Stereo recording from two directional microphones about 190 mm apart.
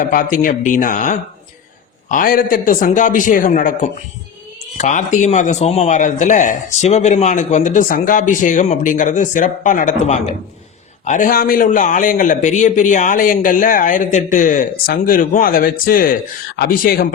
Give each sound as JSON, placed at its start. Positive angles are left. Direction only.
{"t": 0.0, "sound": "a man's voice", "side_deg": 45}